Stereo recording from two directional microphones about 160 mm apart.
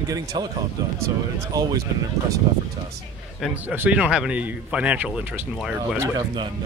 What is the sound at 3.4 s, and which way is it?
A man's voice, 10° right (ahead or behind).